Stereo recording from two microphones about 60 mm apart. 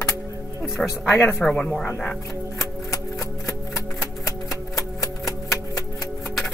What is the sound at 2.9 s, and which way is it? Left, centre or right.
Typewriter, left.